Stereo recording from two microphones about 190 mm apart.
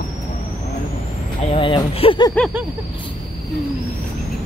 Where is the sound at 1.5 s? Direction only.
30° left (ahead or behind).